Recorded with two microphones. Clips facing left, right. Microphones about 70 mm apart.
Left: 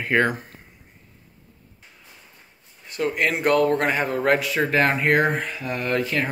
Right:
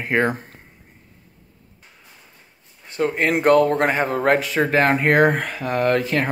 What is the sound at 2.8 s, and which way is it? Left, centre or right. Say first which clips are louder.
Speech: right 3 dB; right.